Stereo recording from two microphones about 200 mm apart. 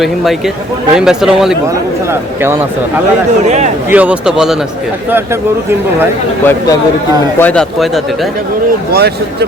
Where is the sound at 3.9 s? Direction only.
5° right (ahead or behind).